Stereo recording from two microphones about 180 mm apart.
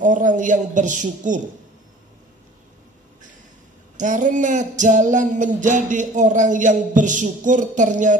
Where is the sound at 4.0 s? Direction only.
45° right (ahead or behind).